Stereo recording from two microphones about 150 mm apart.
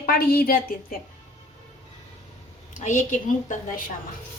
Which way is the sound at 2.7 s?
55° left (ahead or behind).